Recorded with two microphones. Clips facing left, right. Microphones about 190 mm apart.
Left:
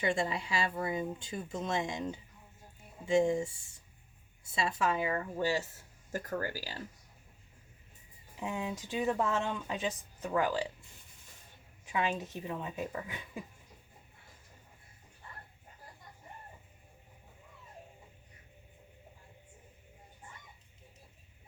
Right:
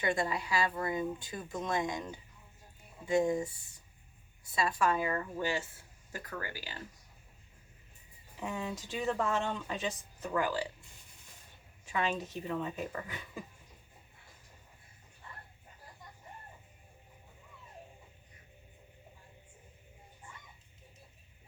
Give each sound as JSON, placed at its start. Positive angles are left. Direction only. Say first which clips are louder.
{"t": 0.0, "sound": "speech", "louder": "even", "side_deg": 25}
{"t": 4.5, "sound": "speech", "louder": "right 1 dB", "side_deg": 25}
{"t": 5.4, "sound": "speech", "louder": "left 2 dB", "side_deg": 35}
{"t": 8.4, "sound": "speech", "louder": "left 1 dB", "side_deg": 15}
{"t": 11.9, "sound": "speech", "louder": "even", "side_deg": 15}